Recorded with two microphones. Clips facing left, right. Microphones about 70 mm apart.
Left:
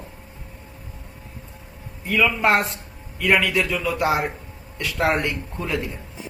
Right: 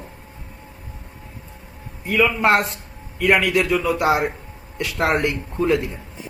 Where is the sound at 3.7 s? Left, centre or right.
Centre.